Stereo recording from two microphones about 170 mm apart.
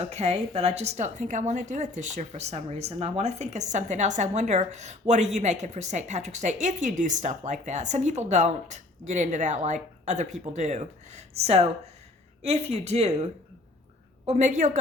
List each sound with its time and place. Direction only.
0.1 s a woman's voice: 40° right (ahead or behind)
14.3 s a woman's voice: 45° right (ahead or behind)